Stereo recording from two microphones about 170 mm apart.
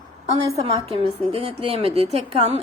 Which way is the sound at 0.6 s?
35° right (ahead or behind).